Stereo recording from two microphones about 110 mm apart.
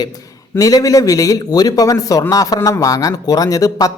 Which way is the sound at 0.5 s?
30° left (ahead or behind).